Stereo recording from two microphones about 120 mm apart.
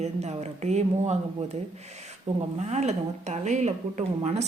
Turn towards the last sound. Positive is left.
turn(degrees=-70)  # may be behind; listen again after turning